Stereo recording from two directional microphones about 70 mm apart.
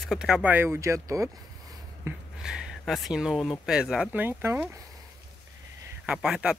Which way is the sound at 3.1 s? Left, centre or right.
Centre.